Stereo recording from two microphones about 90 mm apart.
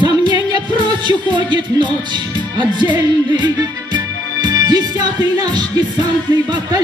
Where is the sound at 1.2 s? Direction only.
60° right (ahead or behind).